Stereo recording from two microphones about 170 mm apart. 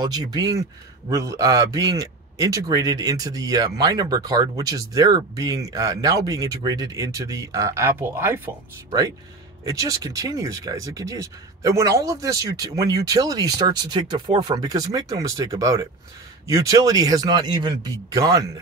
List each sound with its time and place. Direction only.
0.0 s speech: 25° right (ahead or behind)
9.7 s speech: 20° right (ahead or behind)